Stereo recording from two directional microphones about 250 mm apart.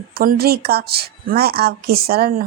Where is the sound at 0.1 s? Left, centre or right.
Right.